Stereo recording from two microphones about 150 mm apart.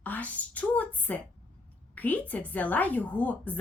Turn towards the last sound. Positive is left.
turn(degrees=10)  # may be behind; listen again after turning